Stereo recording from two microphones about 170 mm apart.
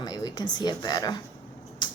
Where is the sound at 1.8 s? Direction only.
25° left (ahead or behind).